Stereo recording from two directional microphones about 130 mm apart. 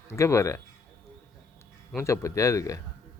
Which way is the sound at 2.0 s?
25° left (ahead or behind).